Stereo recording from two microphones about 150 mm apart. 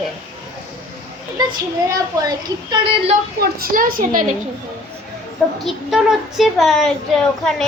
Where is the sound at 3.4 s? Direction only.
80° right.